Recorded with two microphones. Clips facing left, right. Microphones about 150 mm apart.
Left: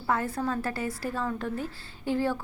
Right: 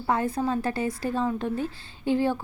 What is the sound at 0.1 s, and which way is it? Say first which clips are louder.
A woman's voice: right 3 dB; 20° right (ahead or behind).